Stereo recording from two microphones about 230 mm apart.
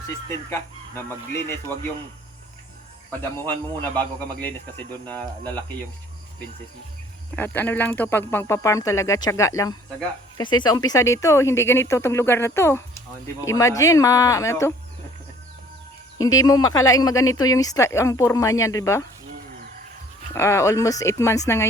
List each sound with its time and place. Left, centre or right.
0.1 s speech: centre
3.1 s speech: centre
7.3 s speech: centre
16.1 s speech: centre
20.3 s speech: centre